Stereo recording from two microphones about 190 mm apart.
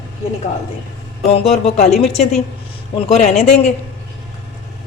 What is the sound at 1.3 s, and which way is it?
A woman's voice, 30° left (ahead or behind).